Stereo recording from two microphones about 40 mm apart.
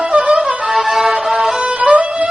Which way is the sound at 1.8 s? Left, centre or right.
Right.